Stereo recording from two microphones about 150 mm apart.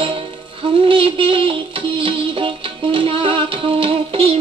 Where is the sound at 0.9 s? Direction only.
35° right (ahead or behind).